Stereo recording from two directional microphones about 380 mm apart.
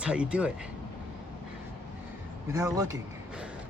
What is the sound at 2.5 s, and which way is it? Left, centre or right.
Speech, centre.